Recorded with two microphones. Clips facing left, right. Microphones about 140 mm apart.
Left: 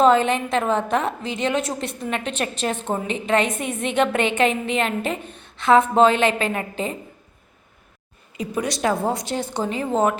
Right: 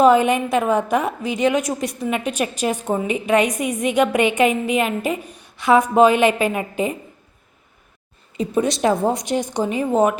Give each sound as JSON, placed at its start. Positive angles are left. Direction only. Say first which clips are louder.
{"t": 0.0, "sound": "a woman's voice", "louder": "right 3 dB", "side_deg": -15}
{"t": 1.6, "sound": "a woman's voice", "louder": "right 3 dB", "side_deg": 25}
{"t": 2.0, "sound": "a woman's voice", "louder": "right 3 dB", "side_deg": -10}
{"t": 8.4, "sound": "a woman's voice", "louder": "right 5 dB", "side_deg": -25}